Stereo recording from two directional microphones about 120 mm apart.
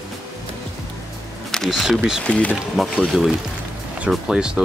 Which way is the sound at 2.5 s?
Centre (ahead or behind).